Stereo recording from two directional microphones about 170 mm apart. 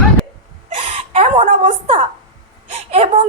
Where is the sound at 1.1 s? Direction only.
40° right (ahead or behind).